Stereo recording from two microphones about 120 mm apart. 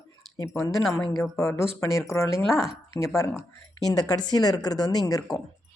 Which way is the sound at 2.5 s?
5° right (ahead or behind).